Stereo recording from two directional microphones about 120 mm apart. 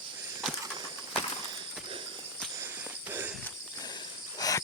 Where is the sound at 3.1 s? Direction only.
15° right (ahead or behind).